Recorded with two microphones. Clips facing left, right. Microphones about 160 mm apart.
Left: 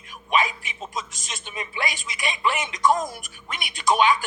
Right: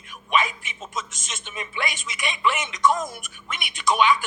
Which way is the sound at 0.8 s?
50° right (ahead or behind).